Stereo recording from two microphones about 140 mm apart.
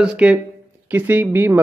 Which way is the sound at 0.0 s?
5° right (ahead or behind).